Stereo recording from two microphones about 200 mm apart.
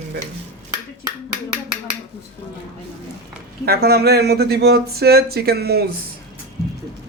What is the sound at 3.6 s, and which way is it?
Speech, 50° right (ahead or behind).